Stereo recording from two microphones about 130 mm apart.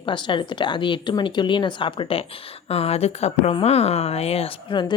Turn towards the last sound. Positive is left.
turn(degrees=35)  # may be behind; listen again after turning